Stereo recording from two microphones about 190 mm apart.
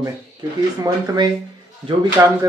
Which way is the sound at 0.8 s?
20° right (ahead or behind).